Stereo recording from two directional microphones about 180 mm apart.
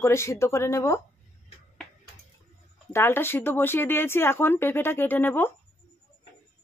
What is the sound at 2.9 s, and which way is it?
A woman's voice, 10° left (ahead or behind).